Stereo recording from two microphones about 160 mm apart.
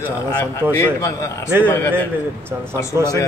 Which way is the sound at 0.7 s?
15° left (ahead or behind).